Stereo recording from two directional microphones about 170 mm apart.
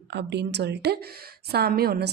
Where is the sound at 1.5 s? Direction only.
65° right (ahead or behind).